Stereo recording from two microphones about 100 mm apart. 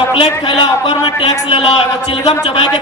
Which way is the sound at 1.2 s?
80° left.